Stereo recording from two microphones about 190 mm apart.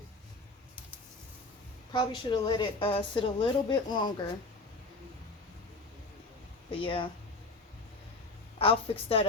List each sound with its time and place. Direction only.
1.9 s a woman's voice: 25° left (ahead or behind)
6.7 s speech: 25° left (ahead or behind)
8.5 s a woman's voice: 30° left (ahead or behind)